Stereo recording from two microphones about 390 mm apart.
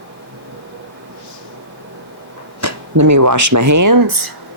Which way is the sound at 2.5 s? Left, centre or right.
Right.